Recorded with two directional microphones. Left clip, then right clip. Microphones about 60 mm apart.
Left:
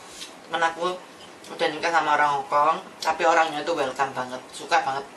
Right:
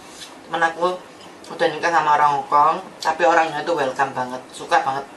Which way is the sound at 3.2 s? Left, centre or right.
Centre.